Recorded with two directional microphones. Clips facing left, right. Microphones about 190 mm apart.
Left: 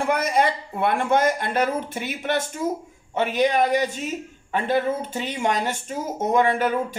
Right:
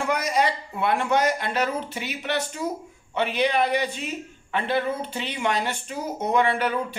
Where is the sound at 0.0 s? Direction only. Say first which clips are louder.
Left 2 dB; 55° left (ahead or behind).